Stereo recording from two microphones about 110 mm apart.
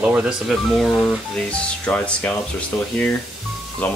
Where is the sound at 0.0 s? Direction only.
10° right (ahead or behind); by 2.3 s 10° left (ahead or behind).